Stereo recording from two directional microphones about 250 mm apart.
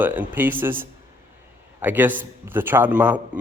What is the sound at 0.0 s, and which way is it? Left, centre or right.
A man's voice, centre.